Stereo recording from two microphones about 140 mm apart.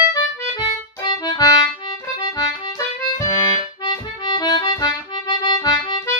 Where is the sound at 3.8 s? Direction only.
30° left (ahead or behind).